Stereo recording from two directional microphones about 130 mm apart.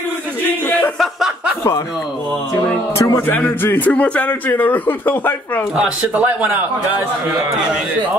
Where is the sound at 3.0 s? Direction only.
20° left (ahead or behind).